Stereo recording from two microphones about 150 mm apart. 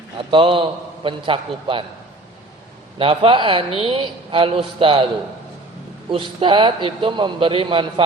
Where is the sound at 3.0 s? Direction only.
40° right (ahead or behind).